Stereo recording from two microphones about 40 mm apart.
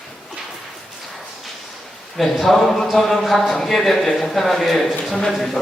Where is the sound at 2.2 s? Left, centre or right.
Centre.